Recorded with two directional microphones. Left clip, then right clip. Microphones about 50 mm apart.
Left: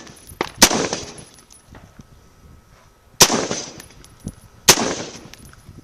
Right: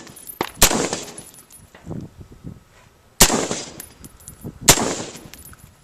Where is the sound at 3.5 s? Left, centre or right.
Centre.